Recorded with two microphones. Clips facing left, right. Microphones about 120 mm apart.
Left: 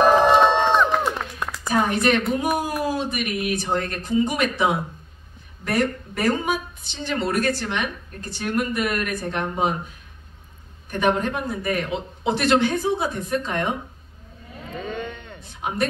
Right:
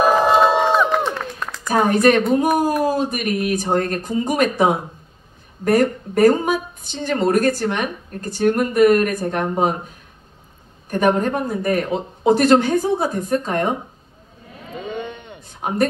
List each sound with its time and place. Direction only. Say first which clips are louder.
0.0 s run: right 1 dB; 10° right (ahead or behind)
1.0 s clapping: right 1 dB; 10° left (ahead or behind)
1.7 s a woman's voice: right 5 dB; 45° right (ahead or behind)
10.9 s a woman's voice: right 4 dB; 45° right (ahead or behind)
14.8 s a sound: right 2 dB; 15° right (ahead or behind)
15.4 s a woman's voice: right 5 dB; 45° right (ahead or behind)